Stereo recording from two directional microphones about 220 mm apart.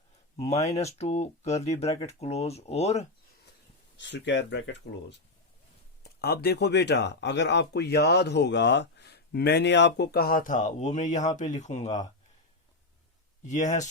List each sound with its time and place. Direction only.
0.5 s speech: 30° left (ahead or behind)
1.9 s speech: 15° left (ahead or behind)
2.1 s speech: 30° left (ahead or behind)
3.9 s speech: 55° left (ahead or behind); by 12.0 s 30° left (ahead or behind)
13.5 s speech: 35° left (ahead or behind)